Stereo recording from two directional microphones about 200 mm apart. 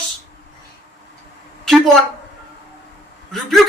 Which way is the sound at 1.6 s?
Centre (ahead or behind).